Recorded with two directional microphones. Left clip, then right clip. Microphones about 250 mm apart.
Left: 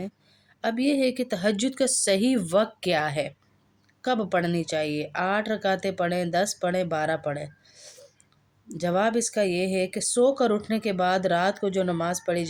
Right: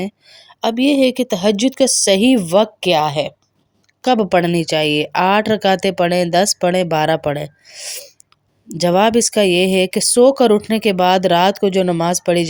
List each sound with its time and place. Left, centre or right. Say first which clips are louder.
0.6 s speech: right 10 dB; right